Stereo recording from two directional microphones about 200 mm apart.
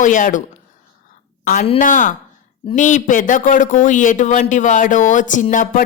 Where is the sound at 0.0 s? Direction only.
40° left (ahead or behind).